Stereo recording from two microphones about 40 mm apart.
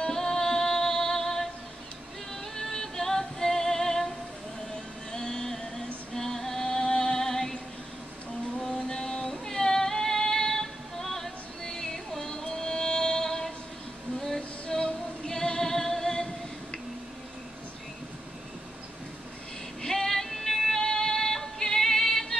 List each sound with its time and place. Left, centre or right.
0.1 s music: centre
2.5 s music: centre
5.1 s music: centre
6.1 s female singing: centre
8.5 s a sound: centre
9.3 s female singing: centre
19.8 s music: centre